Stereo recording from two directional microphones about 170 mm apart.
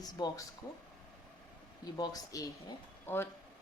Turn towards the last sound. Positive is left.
turn(degrees=15)  # may be behind; listen again after turning